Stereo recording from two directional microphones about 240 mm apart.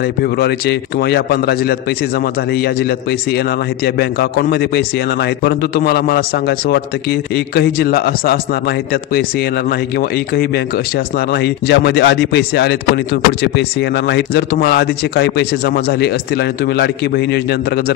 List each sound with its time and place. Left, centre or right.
0.0 s a man's voice: left